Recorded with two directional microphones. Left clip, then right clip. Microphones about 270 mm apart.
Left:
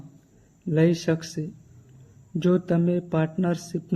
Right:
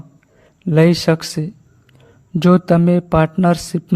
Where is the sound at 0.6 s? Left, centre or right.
Right.